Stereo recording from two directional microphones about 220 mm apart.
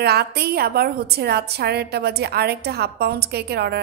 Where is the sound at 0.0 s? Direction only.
45° right (ahead or behind).